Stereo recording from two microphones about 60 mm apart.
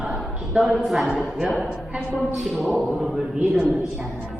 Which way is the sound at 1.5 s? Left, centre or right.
Centre.